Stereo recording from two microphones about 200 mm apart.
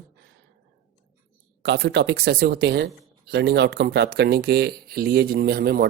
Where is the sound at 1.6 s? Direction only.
60° right (ahead or behind).